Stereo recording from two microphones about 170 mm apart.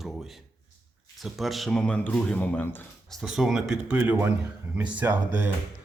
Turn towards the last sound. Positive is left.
turn(degrees=-10)  # may be behind; listen again after turning